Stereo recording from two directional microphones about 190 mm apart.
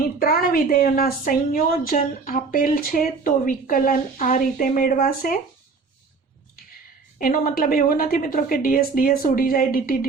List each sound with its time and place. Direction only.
0.2 s a woman's voice: 50° left (ahead or behind)
7.2 s a woman's voice: 50° left (ahead or behind)